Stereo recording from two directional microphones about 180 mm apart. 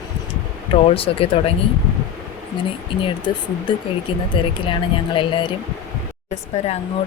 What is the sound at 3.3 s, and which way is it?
Speech, 25° left (ahead or behind).